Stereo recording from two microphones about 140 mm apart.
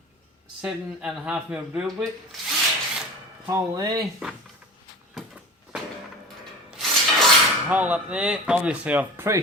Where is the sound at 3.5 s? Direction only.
25° right (ahead or behind).